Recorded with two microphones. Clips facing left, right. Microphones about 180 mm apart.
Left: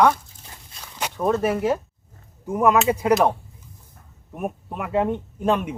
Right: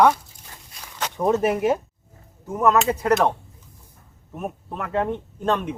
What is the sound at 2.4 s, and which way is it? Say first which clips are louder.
Speech: left 1 dB; 10° left (ahead or behind).